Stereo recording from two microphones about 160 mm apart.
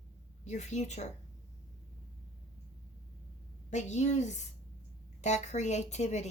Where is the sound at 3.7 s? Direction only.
45° left (ahead or behind).